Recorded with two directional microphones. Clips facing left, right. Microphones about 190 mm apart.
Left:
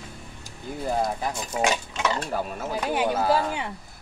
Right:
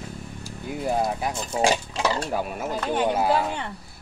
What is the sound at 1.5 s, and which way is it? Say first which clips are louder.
Stir: right 3 dB; 30° right (ahead or behind).